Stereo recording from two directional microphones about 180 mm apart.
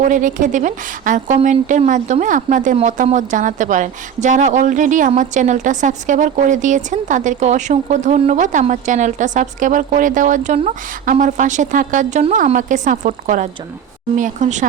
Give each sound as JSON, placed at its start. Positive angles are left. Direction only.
{"t": 0.0, "sound": "a woman's voice", "side_deg": -45}